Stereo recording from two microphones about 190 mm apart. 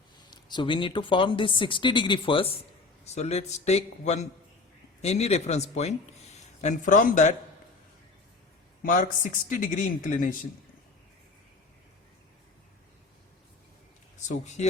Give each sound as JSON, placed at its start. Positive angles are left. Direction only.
{"t": 0.3, "sound": "a man's voice", "side_deg": 20}
{"t": 8.8, "sound": "speech", "side_deg": 45}
{"t": 14.2, "sound": "speech", "side_deg": 40}